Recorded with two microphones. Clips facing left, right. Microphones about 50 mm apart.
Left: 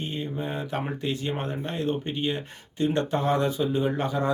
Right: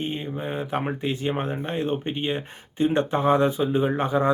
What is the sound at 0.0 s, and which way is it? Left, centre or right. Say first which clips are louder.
Speech: right 2 dB; right.